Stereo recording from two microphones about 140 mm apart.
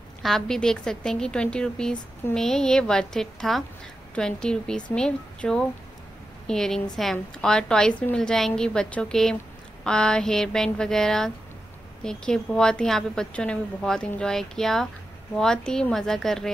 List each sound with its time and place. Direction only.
0.2 s a woman's voice: 5° left (ahead or behind)